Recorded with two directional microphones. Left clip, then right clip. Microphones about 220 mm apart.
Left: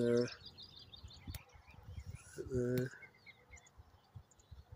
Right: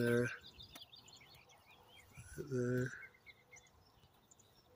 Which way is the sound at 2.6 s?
15° left (ahead or behind).